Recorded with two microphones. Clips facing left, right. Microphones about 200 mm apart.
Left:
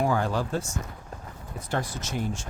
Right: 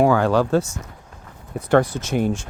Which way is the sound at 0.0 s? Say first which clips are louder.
Right 9 dB; 85° right.